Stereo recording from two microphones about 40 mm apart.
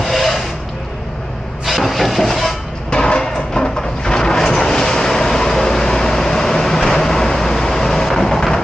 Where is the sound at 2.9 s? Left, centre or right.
Left.